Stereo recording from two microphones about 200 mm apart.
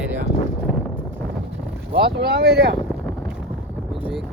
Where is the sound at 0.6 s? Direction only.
5° right (ahead or behind).